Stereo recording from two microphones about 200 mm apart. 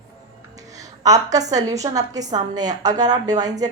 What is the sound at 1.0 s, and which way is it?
A woman's voice, 20° right (ahead or behind).